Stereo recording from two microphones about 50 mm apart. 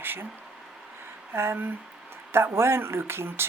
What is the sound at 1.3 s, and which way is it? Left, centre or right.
Speech, right.